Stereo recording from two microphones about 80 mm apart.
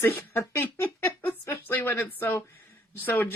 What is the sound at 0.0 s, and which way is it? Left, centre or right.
Speech, left.